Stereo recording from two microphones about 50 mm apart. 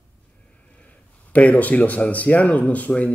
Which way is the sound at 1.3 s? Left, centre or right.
Left.